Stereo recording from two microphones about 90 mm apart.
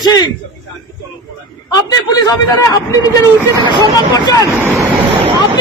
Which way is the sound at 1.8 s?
45° left (ahead or behind).